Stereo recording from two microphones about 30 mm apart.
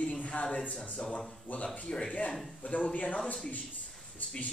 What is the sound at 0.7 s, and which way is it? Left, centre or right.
Speech, left.